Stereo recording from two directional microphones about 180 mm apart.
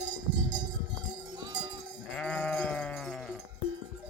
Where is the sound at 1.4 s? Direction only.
20° right (ahead or behind).